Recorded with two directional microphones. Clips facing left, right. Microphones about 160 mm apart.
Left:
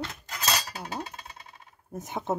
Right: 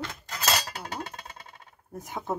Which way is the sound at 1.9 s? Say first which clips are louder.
Left 2 dB; 20° left (ahead or behind).